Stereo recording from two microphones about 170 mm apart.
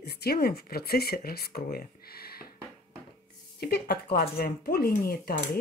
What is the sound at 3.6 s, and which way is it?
Speech, 65° left (ahead or behind).